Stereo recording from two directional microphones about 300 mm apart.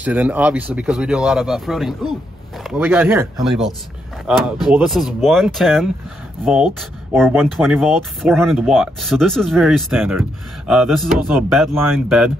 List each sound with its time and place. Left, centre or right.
0.0 s speech: centre